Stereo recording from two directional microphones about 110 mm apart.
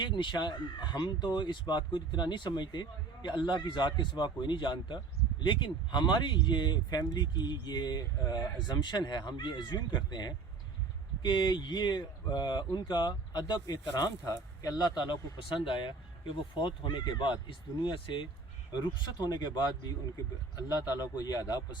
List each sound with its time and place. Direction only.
0.0 s speech: 45° left (ahead or behind)